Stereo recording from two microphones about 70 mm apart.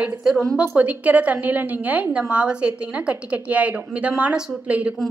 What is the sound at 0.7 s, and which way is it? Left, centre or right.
A woman's voice, right.